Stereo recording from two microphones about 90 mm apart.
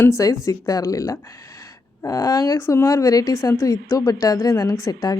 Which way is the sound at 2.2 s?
40° left (ahead or behind).